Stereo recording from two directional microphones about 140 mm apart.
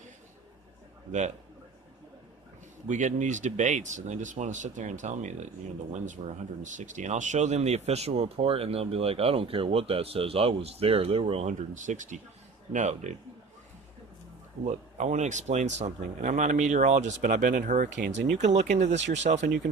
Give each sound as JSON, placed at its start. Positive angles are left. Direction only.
{"t": 2.8, "sound": "speech", "side_deg": -60}
{"t": 14.6, "sound": "speech", "side_deg": -55}